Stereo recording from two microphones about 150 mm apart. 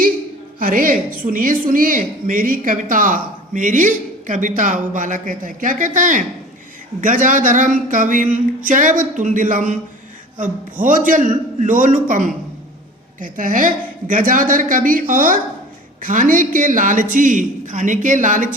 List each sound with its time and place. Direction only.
0.6 s a woman's voice: 70° right (ahead or behind)